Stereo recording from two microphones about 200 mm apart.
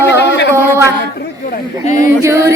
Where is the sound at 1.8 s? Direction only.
35° left (ahead or behind).